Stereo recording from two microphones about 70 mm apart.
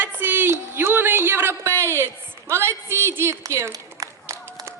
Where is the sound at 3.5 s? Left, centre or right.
Right.